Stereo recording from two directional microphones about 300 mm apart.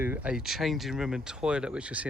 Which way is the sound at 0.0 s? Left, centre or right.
Centre.